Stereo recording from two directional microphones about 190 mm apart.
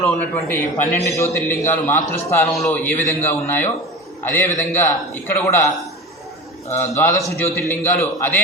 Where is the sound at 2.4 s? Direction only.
Centre (ahead or behind).